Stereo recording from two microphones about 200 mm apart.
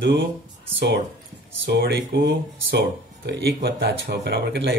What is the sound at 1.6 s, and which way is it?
A man's voice, 55° right (ahead or behind).